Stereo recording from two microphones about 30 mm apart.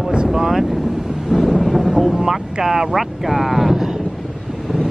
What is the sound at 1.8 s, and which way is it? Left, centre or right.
Vehicle, centre.